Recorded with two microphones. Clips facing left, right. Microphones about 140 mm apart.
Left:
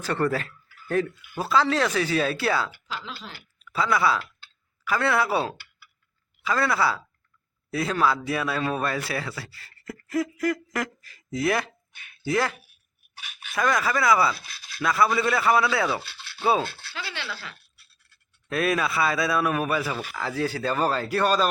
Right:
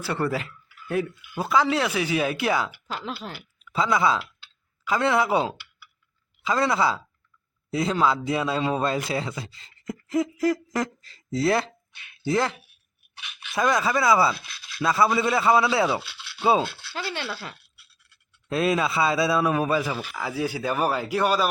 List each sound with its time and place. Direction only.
0.0 s speech: 10° right (ahead or behind)
2.8 s speech: 50° right (ahead or behind)
3.6 s speech: 20° right (ahead or behind)
11.9 s a sound: 45° left (ahead or behind)
12.2 s speech: 25° right (ahead or behind)
14.3 s a sound: 45° left (ahead or behind)
14.8 s speech: 25° right (ahead or behind)
16.0 s rub: 50° left (ahead or behind)
16.4 s speech: 20° right (ahead or behind)
16.6 s speech: 50° left (ahead or behind)
16.9 s speech: 50° right (ahead or behind)
17.7 s scratch: 50° left (ahead or behind)
18.4 s speech: 20° right (ahead or behind)